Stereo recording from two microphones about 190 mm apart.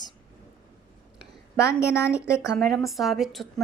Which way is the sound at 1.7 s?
5° right (ahead or behind).